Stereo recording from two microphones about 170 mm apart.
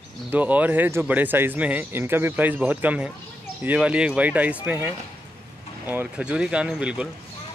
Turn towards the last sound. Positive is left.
turn(degrees=-5)  # may be behind; listen again after turning